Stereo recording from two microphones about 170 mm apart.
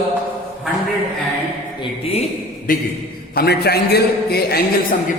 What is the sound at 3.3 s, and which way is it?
A man's voice, 70° left (ahead or behind).